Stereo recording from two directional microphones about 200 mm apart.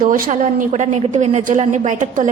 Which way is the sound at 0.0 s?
40° right (ahead or behind).